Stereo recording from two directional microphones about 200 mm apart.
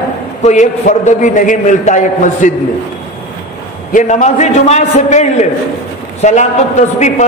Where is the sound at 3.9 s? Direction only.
35° left (ahead or behind).